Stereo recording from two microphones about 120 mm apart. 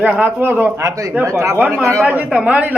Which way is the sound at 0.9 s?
30° right (ahead or behind).